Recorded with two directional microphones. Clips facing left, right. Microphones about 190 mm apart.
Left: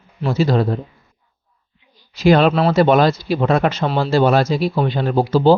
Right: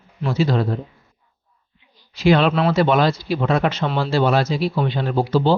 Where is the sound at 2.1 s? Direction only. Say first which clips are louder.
Left 3 dB; 45° left (ahead or behind).